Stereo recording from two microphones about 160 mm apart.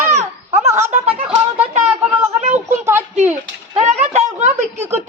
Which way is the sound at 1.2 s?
10° right (ahead or behind).